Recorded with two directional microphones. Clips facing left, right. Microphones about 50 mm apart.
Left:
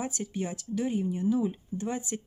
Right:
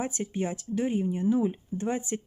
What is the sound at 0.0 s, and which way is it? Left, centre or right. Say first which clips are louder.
Speech: right 3 dB; right.